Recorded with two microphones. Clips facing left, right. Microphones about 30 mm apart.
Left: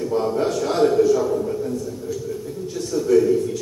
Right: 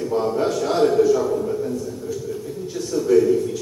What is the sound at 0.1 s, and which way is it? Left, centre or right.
A man's voice, centre.